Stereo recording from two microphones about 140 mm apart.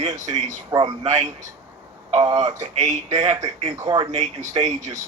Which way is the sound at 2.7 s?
55° right (ahead or behind).